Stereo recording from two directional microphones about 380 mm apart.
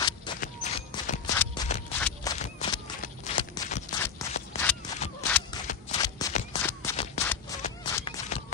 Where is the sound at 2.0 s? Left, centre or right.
Centre.